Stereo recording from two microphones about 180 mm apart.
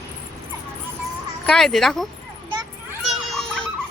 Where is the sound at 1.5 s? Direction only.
Centre (ahead or behind).